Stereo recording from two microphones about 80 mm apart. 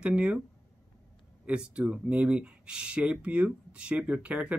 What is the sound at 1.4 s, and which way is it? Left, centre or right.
Speech, centre.